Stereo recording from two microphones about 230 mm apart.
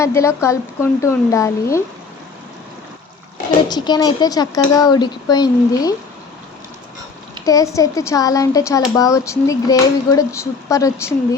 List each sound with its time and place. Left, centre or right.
0.0 s speech: centre
3.7 s speech: centre
7.4 s speech: centre